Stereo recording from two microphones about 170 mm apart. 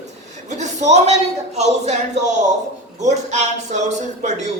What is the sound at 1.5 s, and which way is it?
Speech, 40° right (ahead or behind).